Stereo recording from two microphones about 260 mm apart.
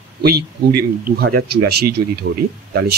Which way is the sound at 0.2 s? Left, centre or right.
Right.